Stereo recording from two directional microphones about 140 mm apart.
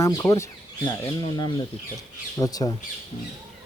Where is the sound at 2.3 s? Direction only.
25° left (ahead or behind).